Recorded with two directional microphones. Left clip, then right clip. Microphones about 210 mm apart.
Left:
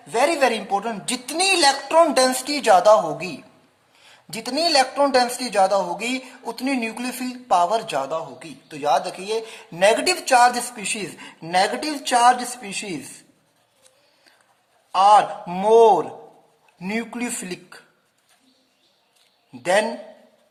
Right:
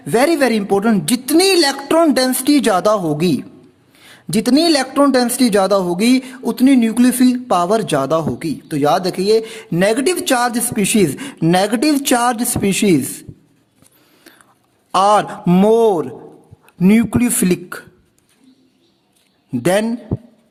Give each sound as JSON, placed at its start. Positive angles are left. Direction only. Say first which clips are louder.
{"t": 0.1, "sound": "a man's voice", "louder": "right 5 dB", "side_deg": -40}
{"t": 14.9, "sound": "speech", "louder": "right 2 dB", "side_deg": -45}
{"t": 19.5, "sound": "speech", "louder": "right 4 dB", "side_deg": -45}